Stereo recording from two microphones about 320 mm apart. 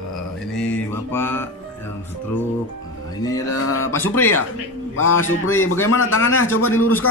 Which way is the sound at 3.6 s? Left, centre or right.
Left.